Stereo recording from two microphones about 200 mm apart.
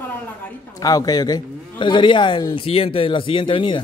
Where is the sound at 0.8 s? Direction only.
20° left (ahead or behind).